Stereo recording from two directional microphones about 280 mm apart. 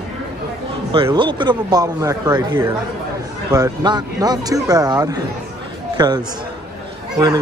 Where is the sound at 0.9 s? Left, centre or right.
Centre.